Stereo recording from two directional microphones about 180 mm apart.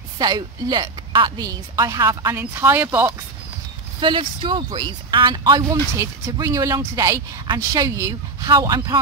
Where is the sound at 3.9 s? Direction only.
25° right (ahead or behind).